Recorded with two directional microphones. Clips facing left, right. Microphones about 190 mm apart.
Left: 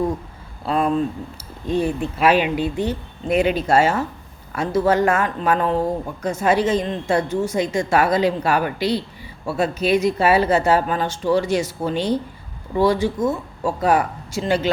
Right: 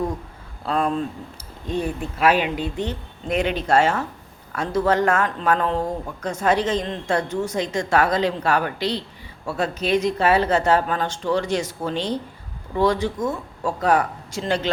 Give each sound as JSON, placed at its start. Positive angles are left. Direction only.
{"t": 0.6, "sound": "speech", "side_deg": 5}
{"t": 2.0, "sound": "speech", "side_deg": 30}
{"t": 2.6, "sound": "speech", "side_deg": 10}